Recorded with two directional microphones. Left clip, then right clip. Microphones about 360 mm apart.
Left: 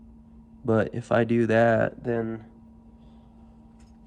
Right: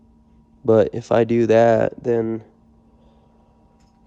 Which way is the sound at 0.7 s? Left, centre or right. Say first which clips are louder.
Right 8 dB; centre.